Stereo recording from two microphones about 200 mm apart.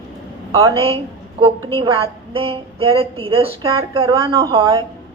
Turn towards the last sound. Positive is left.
turn(degrees=-25)  # may be behind; listen again after turning